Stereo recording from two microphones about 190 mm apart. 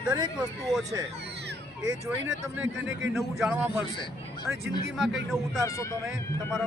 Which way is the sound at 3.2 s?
Centre (ahead or behind).